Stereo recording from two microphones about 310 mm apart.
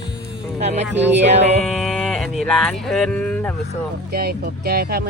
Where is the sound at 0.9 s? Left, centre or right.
Right.